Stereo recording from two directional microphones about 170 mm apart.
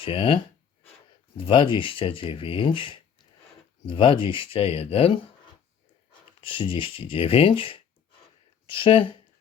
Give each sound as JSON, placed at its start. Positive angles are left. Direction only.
{"t": 0.0, "sound": "speech", "side_deg": 30}
{"t": 1.4, "sound": "speech", "side_deg": 30}
{"t": 6.4, "sound": "speech", "side_deg": 30}